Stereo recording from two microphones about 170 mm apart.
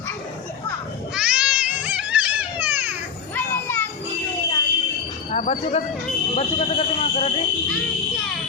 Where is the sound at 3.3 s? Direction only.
10° left (ahead or behind).